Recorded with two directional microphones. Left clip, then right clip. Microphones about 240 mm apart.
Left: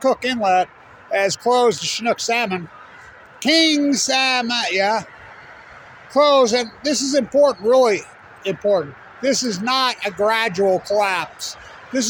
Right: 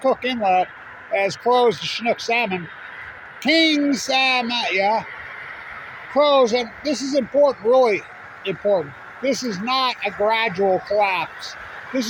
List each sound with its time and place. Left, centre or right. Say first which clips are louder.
0.0 s speech: left 1 dB; centre
6.1 s speech: left 2 dB; left